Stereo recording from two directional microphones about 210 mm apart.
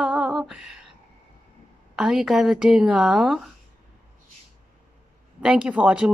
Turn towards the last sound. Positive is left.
turn(degrees=-5)  # may be behind; listen again after turning